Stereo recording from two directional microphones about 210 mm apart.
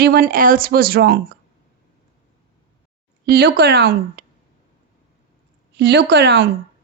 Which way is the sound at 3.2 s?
50° right (ahead or behind).